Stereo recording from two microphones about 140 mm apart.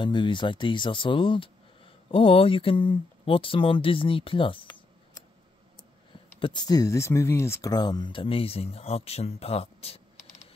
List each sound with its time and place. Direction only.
0.0 s speech: 35° left (ahead or behind)
6.4 s speech: 30° left (ahead or behind)